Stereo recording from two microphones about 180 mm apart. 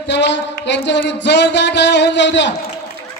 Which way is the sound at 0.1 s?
75° left (ahead or behind).